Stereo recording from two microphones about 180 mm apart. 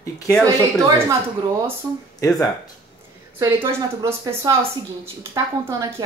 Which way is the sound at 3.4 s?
15° right (ahead or behind).